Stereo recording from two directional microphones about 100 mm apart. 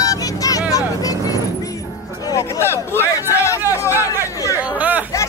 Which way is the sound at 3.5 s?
25° left (ahead or behind).